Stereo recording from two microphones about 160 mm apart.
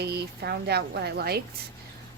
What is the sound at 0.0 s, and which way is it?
Speech, 90° right.